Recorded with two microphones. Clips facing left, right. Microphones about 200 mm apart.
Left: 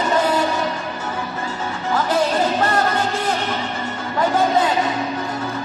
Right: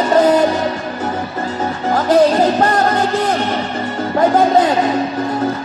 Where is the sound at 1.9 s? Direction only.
40° right (ahead or behind).